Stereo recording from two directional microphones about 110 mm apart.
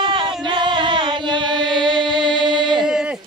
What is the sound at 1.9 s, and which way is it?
Music, 45° right (ahead or behind).